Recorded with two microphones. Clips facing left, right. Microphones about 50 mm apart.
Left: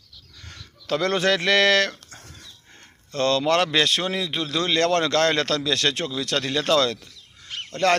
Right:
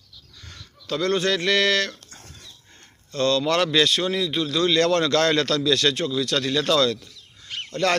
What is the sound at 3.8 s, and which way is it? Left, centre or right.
A man's voice, left.